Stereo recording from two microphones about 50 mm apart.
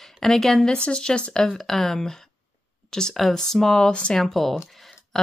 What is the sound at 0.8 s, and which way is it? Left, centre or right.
Speech, centre.